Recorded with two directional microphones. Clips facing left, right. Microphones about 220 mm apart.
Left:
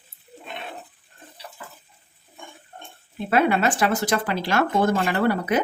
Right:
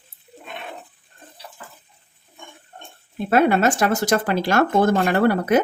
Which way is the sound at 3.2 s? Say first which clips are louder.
Right 3 dB; 45° right (ahead or behind).